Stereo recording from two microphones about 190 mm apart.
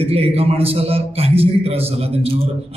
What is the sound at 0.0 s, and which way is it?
A man's voice, 30° right (ahead or behind).